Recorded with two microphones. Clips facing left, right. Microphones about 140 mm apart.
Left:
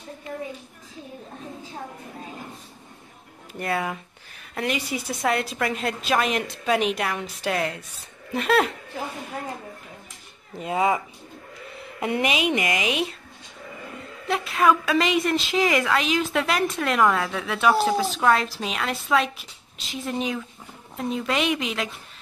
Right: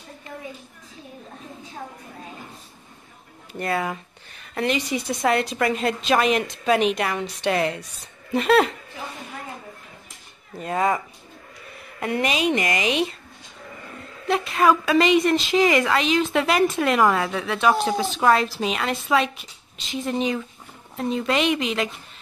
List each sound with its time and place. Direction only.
3.5 s a woman's voice: centre (ahead or behind)
10.6 s a woman's voice: 5° left (ahead or behind)
12.0 s a woman's voice: 15° left (ahead or behind)
14.2 s a woman's voice: centre (ahead or behind)